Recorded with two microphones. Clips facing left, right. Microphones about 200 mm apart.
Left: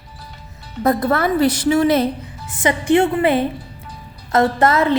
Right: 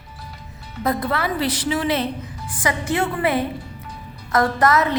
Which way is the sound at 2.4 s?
25° left (ahead or behind).